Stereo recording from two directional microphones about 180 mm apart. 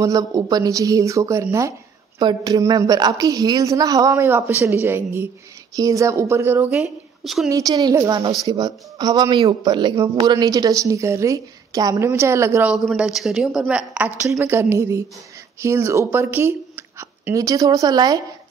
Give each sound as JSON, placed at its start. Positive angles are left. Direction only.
{"t": 0.0, "sound": "a woman's voice", "side_deg": -20}
{"t": 12.7, "sound": "a woman's voice", "side_deg": -5}